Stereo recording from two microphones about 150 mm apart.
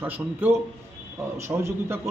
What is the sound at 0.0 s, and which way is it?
A man's voice, 15° right (ahead or behind).